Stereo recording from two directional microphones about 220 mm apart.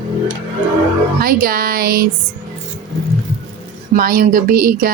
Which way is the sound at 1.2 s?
40° right (ahead or behind).